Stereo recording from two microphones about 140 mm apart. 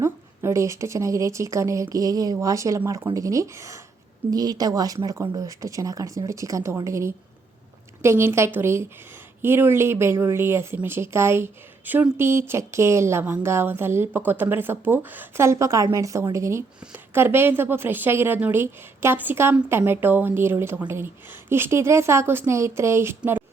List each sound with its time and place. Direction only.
0.0 s a woman's voice: 20° right (ahead or behind)